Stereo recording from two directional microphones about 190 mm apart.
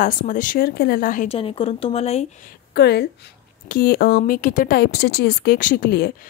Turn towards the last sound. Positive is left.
turn(degrees=55)  # may be behind; listen again after turning